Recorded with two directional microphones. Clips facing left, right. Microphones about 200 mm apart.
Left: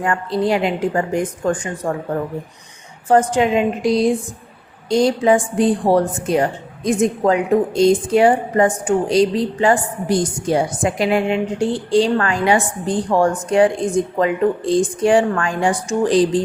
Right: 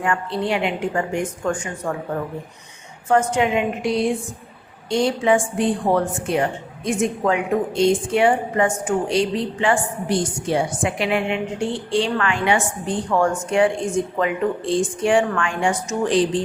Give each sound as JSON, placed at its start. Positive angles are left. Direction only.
{"t": 0.0, "sound": "a woman's voice", "side_deg": 40}
{"t": 3.1, "sound": "a woman's voice", "side_deg": 35}